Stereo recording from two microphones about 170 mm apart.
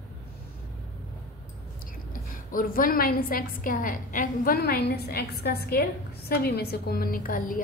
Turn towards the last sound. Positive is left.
turn(degrees=55)  # may be behind; listen again after turning